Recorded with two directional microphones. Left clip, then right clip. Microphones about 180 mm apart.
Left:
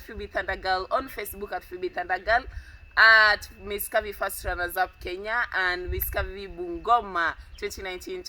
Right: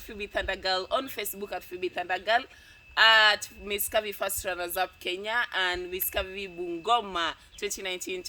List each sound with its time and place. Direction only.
0.1 s a woman's voice: 25° right (ahead or behind)